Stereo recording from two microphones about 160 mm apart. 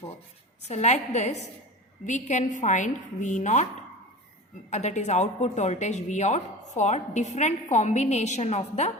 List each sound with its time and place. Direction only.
0.7 s a woman's voice: 45° left (ahead or behind)
4.7 s a woman's voice: 45° left (ahead or behind)